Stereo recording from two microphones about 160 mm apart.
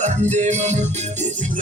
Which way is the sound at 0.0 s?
45° right (ahead or behind).